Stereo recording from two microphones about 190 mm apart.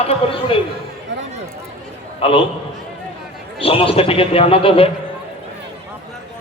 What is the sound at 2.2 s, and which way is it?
Speech, 30° left (ahead or behind).